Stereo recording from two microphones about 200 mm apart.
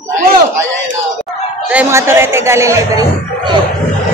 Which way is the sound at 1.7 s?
10° right (ahead or behind).